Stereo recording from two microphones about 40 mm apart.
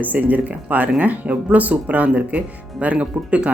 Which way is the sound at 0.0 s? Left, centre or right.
Right.